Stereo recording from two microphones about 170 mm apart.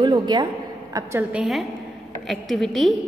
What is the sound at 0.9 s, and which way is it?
Speech, 15° right (ahead or behind).